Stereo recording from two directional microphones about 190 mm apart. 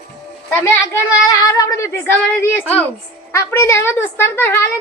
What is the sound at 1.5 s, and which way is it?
A woman's voice, 15° left (ahead or behind).